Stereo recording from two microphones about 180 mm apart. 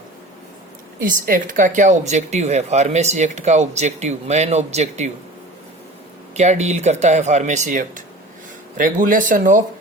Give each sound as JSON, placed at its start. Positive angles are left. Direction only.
{"t": 0.9, "sound": "speech", "side_deg": -50}
{"t": 6.3, "sound": "speech", "side_deg": -40}